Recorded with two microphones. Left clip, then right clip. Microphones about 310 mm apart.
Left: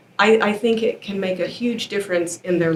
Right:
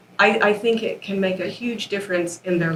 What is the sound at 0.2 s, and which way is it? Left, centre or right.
A woman's voice, left.